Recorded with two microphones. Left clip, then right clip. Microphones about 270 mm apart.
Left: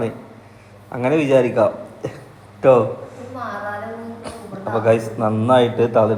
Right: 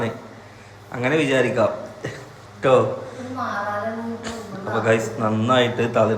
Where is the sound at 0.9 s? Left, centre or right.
Centre.